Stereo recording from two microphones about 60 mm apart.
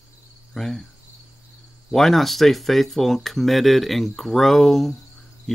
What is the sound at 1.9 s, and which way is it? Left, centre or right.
Speech, centre.